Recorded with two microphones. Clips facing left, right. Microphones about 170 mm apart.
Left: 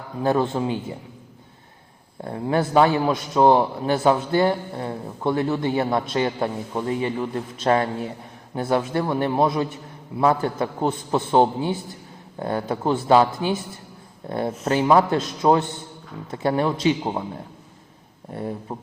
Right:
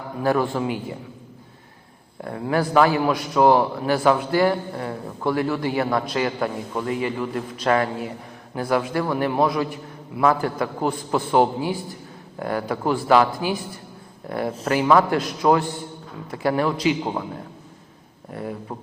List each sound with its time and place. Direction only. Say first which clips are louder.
0.2 s a man's voice: even; 20° left (ahead or behind)
2.2 s a man's voice: even; 25° left (ahead or behind)
18.3 s a man's voice: left 1 dB; 25° left (ahead or behind)